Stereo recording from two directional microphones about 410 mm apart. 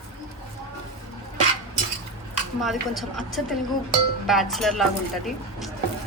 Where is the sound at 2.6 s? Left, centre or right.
Centre.